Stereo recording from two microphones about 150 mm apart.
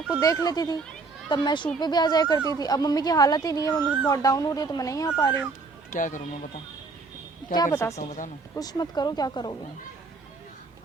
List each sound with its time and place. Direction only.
0.2 s speech: 25° left (ahead or behind)
5.9 s speech: 60° left (ahead or behind)
7.7 s speech: 15° left (ahead or behind)
7.9 s speech: 50° left (ahead or behind)
8.5 s speech: 25° left (ahead or behind)